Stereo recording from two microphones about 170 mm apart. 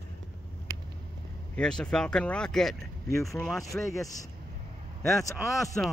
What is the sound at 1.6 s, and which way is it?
Speech, 5° left (ahead or behind).